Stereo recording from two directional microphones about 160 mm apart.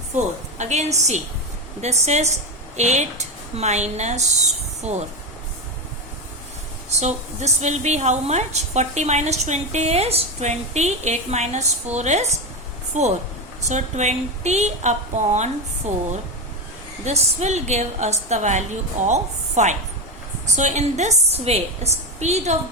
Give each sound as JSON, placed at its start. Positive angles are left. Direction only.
{"t": 0.6, "sound": "a woman's voice", "side_deg": -45}
{"t": 7.0, "sound": "a woman's voice", "side_deg": -45}
{"t": 17.1, "sound": "a woman's voice", "side_deg": -45}